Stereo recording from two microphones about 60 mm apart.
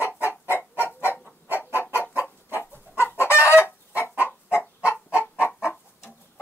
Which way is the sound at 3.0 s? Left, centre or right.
Left.